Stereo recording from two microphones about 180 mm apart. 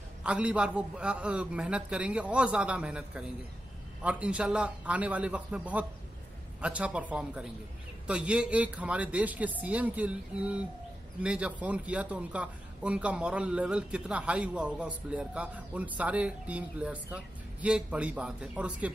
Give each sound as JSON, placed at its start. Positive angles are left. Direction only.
{"t": 0.2, "sound": "a man's voice", "side_deg": -5}